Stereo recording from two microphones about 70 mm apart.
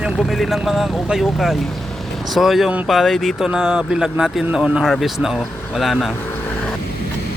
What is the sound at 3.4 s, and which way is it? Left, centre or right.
Speech, centre.